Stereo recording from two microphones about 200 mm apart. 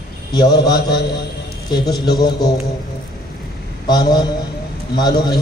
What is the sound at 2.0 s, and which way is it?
Speech, 20° left (ahead or behind).